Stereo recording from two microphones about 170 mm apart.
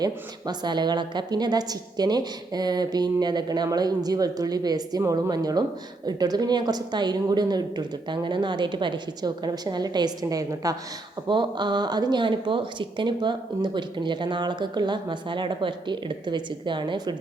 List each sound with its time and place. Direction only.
0.0 s speech: 25° right (ahead or behind)